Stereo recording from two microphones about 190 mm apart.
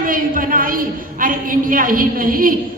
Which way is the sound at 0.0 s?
45° right (ahead or behind).